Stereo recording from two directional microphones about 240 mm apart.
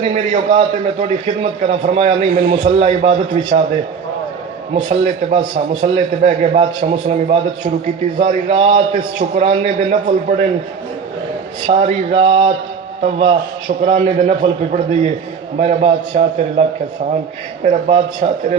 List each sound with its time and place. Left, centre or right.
0.0 s a man's voice: right
2.5 s a man's voice: right
4.7 s a man's voice: right
11.6 s a man's voice: right